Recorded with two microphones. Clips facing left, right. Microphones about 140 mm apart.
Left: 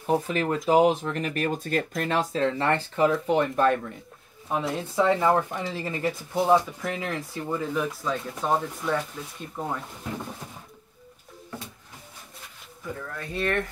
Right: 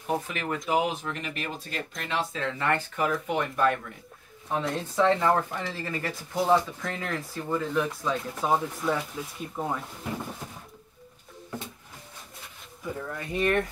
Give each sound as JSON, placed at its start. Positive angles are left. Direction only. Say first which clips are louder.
{"t": 0.3, "sound": "speech", "louder": "left 6 dB", "side_deg": 35}
{"t": 4.5, "sound": "speech", "louder": "left 1 dB", "side_deg": 10}
{"t": 13.0, "sound": "speech", "louder": "right 2 dB", "side_deg": -15}